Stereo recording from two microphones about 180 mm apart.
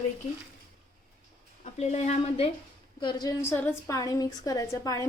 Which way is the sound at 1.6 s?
40° left (ahead or behind).